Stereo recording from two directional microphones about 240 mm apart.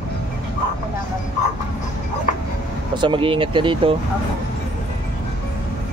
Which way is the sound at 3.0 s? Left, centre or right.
Right.